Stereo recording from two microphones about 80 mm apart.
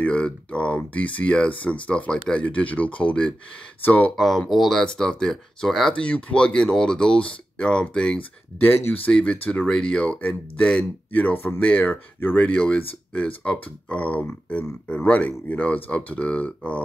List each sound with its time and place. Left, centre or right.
0.0 s speech: centre
4.2 s speech: centre
8.5 s speech: left